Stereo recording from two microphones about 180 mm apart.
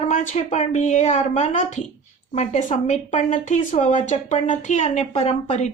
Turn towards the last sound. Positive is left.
turn(degrees=40)  # may be behind; listen again after turning